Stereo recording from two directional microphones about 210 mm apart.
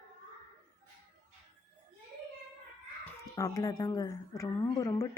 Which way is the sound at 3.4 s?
15° left (ahead or behind).